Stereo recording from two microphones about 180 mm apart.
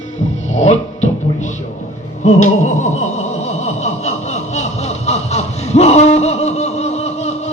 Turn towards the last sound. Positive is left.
turn(degrees=35)  # may be behind; listen again after turning